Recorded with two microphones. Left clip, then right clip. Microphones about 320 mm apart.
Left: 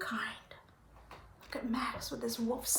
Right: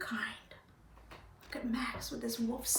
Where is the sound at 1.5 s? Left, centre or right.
Centre.